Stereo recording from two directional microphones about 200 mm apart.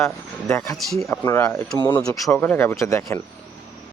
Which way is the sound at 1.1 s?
15° left (ahead or behind).